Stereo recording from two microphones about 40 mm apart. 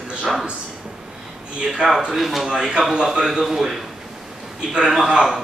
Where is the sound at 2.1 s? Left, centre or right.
Centre.